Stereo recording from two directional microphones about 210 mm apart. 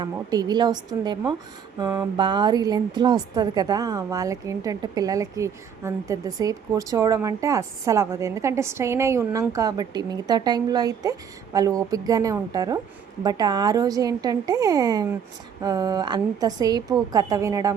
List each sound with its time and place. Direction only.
0.0 s a woman's voice: 20° right (ahead or behind)